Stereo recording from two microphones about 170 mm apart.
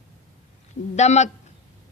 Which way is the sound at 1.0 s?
40° left (ahead or behind).